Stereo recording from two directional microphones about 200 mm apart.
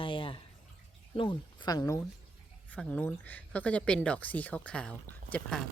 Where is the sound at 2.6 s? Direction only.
5° left (ahead or behind).